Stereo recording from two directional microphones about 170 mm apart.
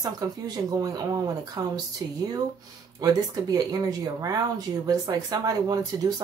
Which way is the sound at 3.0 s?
20° right (ahead or behind).